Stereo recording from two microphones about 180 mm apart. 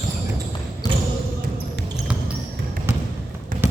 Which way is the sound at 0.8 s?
20° left (ahead or behind).